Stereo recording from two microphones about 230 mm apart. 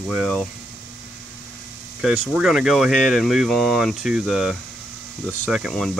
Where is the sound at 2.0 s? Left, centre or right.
Centre.